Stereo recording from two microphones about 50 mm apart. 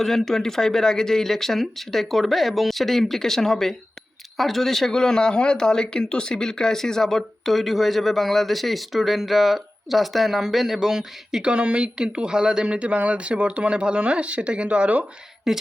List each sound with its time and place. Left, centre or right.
0.0 s speech: centre
11.5 s speech: right
15.5 s speech: centre